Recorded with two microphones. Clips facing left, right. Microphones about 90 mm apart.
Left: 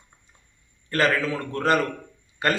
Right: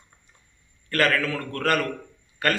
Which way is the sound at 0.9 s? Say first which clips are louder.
Left 1 dB; 20° left (ahead or behind).